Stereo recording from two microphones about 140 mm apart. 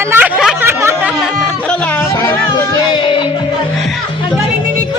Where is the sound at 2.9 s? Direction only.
35° left (ahead or behind).